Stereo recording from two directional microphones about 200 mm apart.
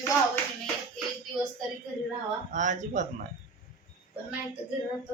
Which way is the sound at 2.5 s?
40° right (ahead or behind).